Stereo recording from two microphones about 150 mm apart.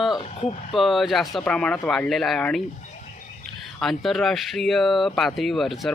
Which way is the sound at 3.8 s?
Centre (ahead or behind).